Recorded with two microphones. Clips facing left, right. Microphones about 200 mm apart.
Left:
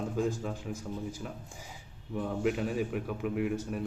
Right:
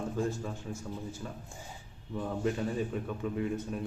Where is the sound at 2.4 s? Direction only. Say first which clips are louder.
Left 1 dB; 15° left (ahead or behind).